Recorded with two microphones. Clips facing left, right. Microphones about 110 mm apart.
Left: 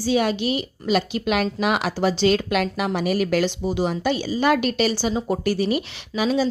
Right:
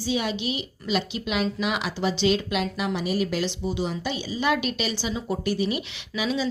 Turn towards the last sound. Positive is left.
turn(degrees=45)  # may be behind; listen again after turning